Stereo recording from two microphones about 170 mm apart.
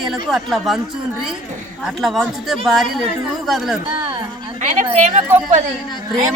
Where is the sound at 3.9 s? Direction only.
30° right (ahead or behind).